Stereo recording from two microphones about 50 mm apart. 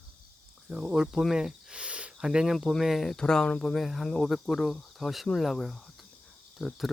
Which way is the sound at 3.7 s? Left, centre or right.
Centre.